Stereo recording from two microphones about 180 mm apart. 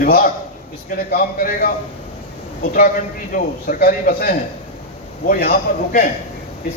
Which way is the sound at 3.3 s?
55° left (ahead or behind).